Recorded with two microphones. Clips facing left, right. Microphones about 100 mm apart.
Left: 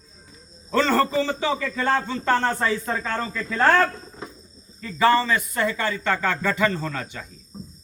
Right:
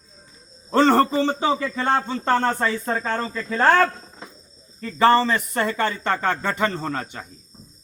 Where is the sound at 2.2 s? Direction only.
35° right (ahead or behind).